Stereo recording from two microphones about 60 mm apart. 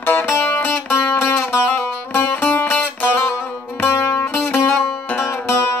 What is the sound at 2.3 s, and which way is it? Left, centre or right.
Music, left.